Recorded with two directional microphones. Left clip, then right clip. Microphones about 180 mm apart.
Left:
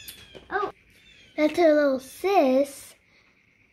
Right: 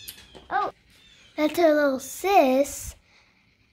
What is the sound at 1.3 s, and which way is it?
Speech, centre (ahead or behind).